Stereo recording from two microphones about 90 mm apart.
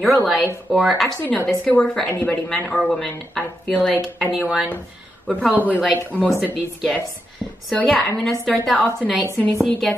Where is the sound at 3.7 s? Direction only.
15° left (ahead or behind).